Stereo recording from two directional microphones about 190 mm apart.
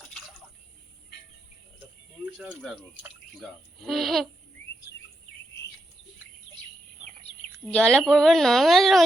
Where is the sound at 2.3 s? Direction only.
Centre (ahead or behind).